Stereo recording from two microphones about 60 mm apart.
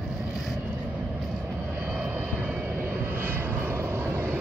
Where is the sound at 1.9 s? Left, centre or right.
Right.